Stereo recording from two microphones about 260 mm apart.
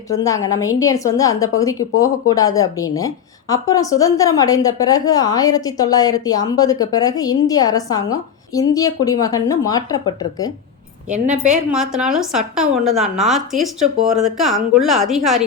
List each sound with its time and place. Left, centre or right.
0.2 s a woman's voice: centre
11.1 s a woman's voice: right
11.7 s a woman's voice: centre